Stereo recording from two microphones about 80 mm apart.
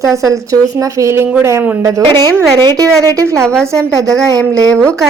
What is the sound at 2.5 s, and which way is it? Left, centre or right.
Speech, right.